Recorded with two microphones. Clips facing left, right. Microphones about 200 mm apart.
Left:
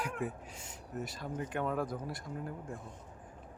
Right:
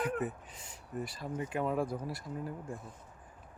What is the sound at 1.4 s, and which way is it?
Speech, 5° right (ahead or behind).